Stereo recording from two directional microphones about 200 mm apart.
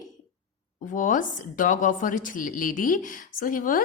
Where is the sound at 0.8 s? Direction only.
40° left (ahead or behind).